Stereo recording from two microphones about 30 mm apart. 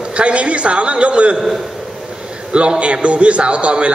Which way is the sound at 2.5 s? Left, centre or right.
Right.